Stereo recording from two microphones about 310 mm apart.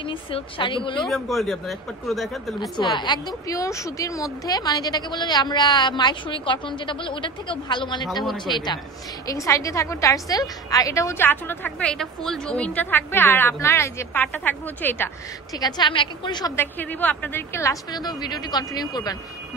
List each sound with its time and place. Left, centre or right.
0.0 s a woman's voice: centre
1.0 s speech: centre
2.8 s a woman's voice: centre